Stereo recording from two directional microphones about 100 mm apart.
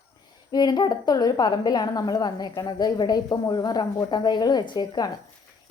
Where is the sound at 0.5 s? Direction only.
45° left (ahead or behind).